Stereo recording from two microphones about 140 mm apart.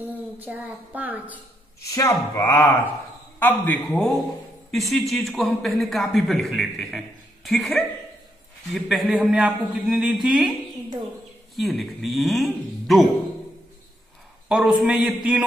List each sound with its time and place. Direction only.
0.1 s a woman's voice: 10° right (ahead or behind)
2.0 s a man's voice: 20° left (ahead or behind); by 10.5 s 5° right (ahead or behind)
11.5 s a man's voice: centre (ahead or behind)
14.5 s a man's voice: 5° right (ahead or behind)